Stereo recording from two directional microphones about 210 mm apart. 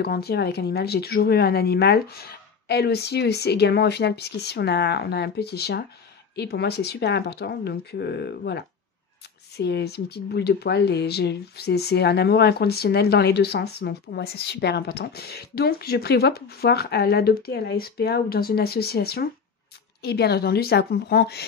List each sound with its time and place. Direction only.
0.0 s speech: 50° left (ahead or behind)